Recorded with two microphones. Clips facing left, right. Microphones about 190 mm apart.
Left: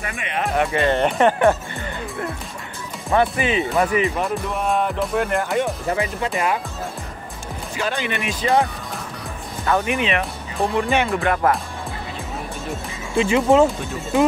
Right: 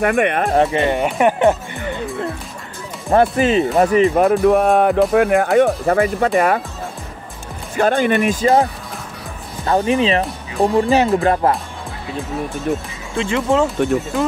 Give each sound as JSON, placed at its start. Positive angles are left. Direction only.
{"t": 0.0, "sound": "speech", "side_deg": -60}
{"t": 0.7, "sound": "speech", "side_deg": -15}
{"t": 1.0, "sound": "speech", "side_deg": -5}
{"t": 1.4, "sound": "speech", "side_deg": -20}
{"t": 3.1, "sound": "speech", "side_deg": -40}
{"t": 4.2, "sound": "speech", "side_deg": -55}
{"t": 7.7, "sound": "speech", "side_deg": -50}
{"t": 9.7, "sound": "speech", "side_deg": -30}
{"t": 13.2, "sound": "speech", "side_deg": 10}